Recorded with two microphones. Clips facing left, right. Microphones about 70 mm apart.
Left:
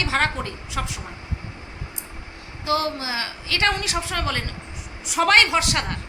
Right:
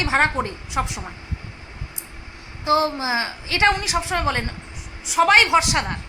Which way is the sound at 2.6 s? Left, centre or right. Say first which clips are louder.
Right 4 dB; right.